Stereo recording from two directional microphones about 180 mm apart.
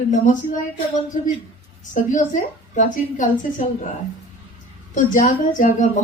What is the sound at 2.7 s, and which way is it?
Speech, 45° left (ahead or behind).